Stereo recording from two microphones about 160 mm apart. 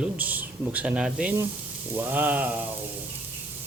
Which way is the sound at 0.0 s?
10° right (ahead or behind).